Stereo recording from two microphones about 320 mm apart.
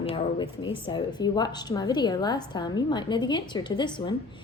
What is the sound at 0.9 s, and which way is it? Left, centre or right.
A woman's voice, centre.